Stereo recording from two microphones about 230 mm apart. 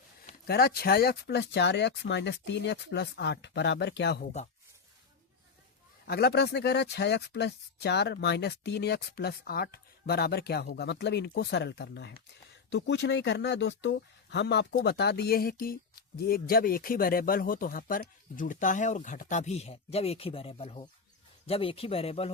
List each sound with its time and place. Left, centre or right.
0.4 s speech: left
6.1 s speech: left